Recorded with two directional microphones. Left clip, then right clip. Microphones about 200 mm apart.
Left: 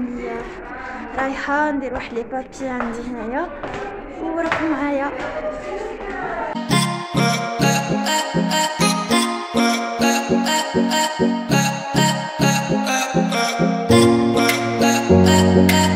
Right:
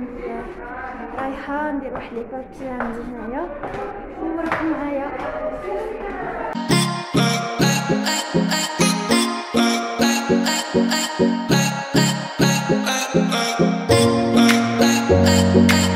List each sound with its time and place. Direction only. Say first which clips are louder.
1.2 s a woman's voice: left 6 dB; 20° left (ahead or behind)
6.7 s music: right 1 dB; centre (ahead or behind)